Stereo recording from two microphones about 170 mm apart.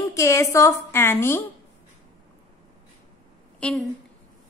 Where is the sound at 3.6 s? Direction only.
5° left (ahead or behind).